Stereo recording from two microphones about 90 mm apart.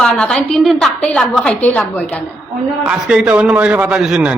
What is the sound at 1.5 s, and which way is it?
Speech, 20° left (ahead or behind).